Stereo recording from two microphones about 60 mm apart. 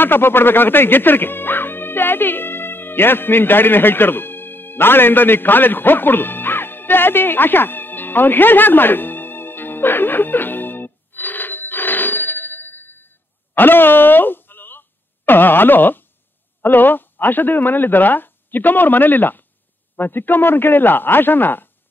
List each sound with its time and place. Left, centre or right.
0.0 s music: left
13.6 s a sound: left
16.6 s speech: left